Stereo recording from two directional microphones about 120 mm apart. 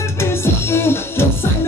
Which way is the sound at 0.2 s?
20° left (ahead or behind).